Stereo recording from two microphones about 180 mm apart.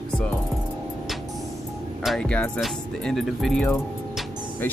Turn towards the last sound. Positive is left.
turn(degrees=10)  # may be behind; listen again after turning